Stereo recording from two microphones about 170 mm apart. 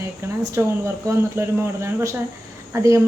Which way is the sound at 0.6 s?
15° right (ahead or behind).